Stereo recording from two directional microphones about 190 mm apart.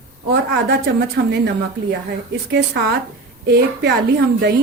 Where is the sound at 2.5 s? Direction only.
60° right (ahead or behind).